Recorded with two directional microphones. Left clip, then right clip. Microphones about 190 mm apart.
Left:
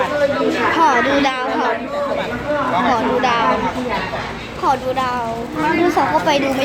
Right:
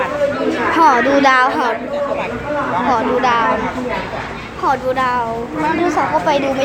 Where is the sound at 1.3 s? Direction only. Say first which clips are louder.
Right 5 dB; 35° right (ahead or behind).